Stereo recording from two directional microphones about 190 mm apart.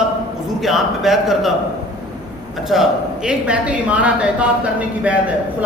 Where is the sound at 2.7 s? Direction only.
5° right (ahead or behind).